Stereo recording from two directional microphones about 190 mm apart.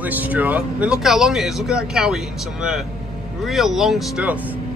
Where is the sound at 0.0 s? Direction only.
10° right (ahead or behind).